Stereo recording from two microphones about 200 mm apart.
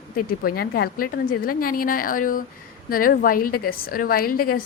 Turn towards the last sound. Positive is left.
turn(degrees=45)  # may be behind; listen again after turning